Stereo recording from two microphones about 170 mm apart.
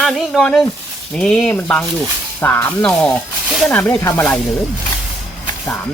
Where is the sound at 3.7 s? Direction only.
10° left (ahead or behind).